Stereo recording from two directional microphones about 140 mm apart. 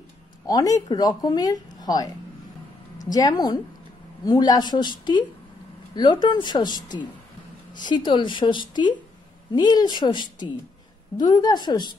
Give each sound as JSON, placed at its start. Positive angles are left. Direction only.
{"t": 0.5, "sound": "speech", "side_deg": 25}